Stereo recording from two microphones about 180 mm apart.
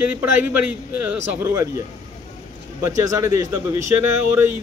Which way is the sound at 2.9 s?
20° right (ahead or behind).